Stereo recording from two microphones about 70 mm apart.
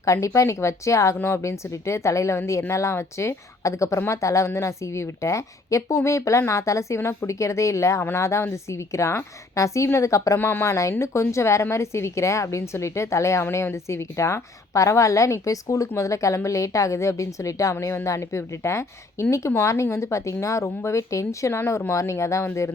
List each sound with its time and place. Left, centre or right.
0.0 s a woman's voice: left
10.3 s a woman's voice: left